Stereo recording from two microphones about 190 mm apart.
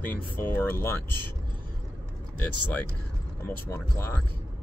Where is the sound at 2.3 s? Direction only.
10° left (ahead or behind).